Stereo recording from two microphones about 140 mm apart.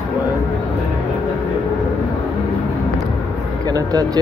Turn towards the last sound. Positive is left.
turn(degrees=-25)  # may be behind; listen again after turning